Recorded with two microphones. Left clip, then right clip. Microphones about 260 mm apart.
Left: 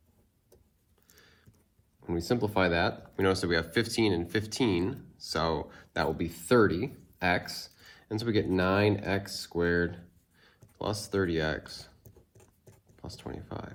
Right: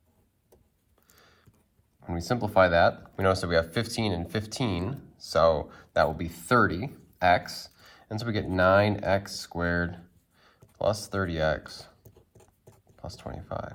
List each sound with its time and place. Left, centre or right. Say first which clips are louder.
1.1 s a sound: right 1 dB; right
2.0 s speech: even; right
13.0 s speech: right 2 dB; right